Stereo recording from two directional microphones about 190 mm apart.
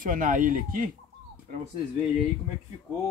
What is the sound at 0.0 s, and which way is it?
Speech, 45° right (ahead or behind).